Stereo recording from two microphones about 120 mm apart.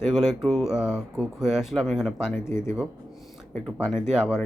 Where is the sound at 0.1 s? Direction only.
5° right (ahead or behind).